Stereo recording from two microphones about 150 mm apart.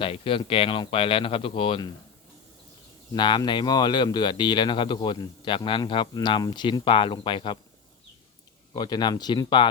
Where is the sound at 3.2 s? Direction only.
30° left (ahead or behind).